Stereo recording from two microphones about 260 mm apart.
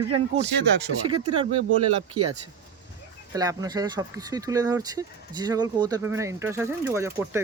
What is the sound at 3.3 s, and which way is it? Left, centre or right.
Speech, centre.